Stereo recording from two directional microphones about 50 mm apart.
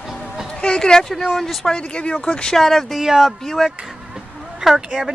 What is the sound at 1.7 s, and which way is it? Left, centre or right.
Speech, left.